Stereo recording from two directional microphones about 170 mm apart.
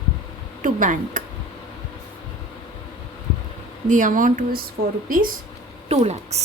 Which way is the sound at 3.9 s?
50° right (ahead or behind).